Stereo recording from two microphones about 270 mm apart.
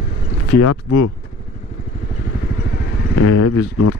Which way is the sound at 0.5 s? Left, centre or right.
Left.